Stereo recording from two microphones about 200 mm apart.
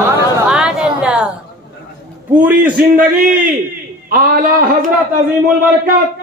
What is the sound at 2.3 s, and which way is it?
Speech, 5° right (ahead or behind).